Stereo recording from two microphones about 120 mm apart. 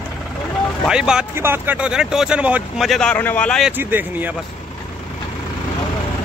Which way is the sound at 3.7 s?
15° right (ahead or behind).